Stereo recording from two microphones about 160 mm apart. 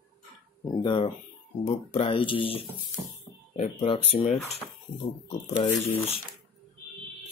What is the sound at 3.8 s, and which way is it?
Speech, 40° left (ahead or behind).